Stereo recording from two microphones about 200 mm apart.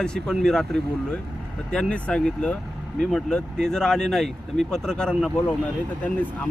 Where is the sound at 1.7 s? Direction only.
5° left (ahead or behind).